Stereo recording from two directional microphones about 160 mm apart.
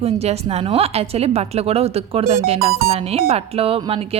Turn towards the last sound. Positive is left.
turn(degrees=-35)  # may be behind; listen again after turning